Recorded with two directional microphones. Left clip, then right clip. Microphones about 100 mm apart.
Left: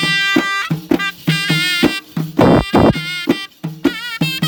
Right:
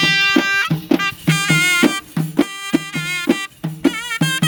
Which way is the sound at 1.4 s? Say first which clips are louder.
Right 1 dB; 30° left (ahead or behind).